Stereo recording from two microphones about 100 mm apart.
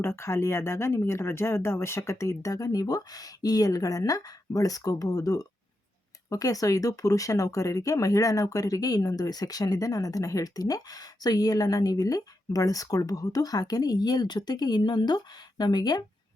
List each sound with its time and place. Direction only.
0.0 s speech: 25° left (ahead or behind); by 16.0 s 45° left (ahead or behind)